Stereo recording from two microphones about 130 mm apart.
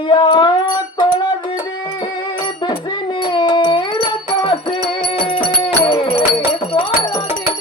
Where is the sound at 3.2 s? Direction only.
35° left (ahead or behind).